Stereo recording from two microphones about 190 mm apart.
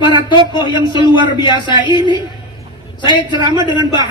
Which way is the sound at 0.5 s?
25° left (ahead or behind).